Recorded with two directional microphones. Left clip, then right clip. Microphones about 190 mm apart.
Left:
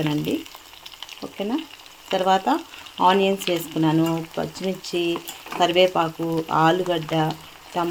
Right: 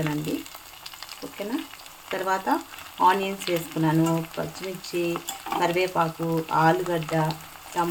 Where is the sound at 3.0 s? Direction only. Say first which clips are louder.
Left 3 dB; 40° left (ahead or behind).